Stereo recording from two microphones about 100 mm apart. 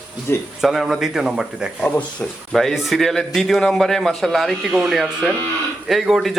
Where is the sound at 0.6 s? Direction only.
5° right (ahead or behind).